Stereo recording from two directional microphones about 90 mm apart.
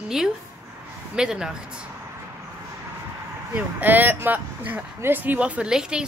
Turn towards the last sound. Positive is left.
turn(degrees=-10)  # may be behind; listen again after turning